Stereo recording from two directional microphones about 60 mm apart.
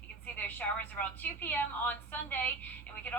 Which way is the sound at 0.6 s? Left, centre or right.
Left.